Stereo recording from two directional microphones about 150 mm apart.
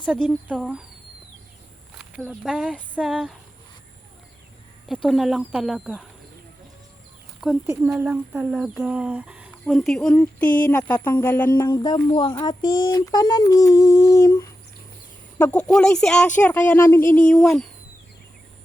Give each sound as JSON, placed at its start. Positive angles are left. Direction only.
{"t": 0.0, "sound": "speech", "side_deg": -5}
{"t": 2.0, "sound": "speech", "side_deg": 0}
{"t": 4.9, "sound": "speech", "side_deg": 0}
{"t": 7.7, "sound": "speech", "side_deg": -20}
{"t": 11.5, "sound": "female singing", "side_deg": 25}
{"t": 15.4, "sound": "speech", "side_deg": 10}